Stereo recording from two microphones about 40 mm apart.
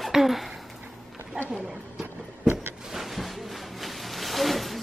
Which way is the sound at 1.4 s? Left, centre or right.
Right.